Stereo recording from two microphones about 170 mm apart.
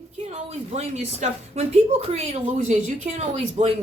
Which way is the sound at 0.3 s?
40° right (ahead or behind).